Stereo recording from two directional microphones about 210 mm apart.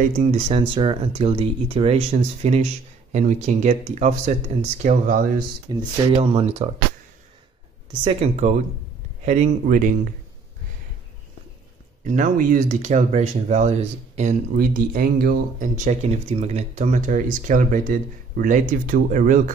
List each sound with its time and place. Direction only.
0.3 s speech: 25° right (ahead or behind); by 5.3 s 40° right (ahead or behind)
5.7 s speech: 25° right (ahead or behind)
7.9 s speech: 25° right (ahead or behind)
12.1 s speech: 40° right (ahead or behind)